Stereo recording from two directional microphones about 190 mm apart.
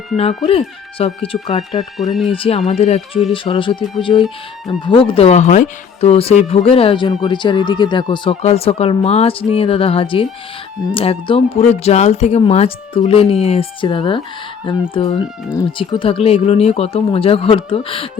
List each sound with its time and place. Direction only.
0.9 s speech: 30° left (ahead or behind)
2.0 s speech: centre (ahead or behind)
2.3 s speech: 30° left (ahead or behind)